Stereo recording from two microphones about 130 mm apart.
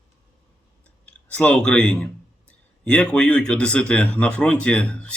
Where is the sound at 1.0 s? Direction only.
10° left (ahead or behind).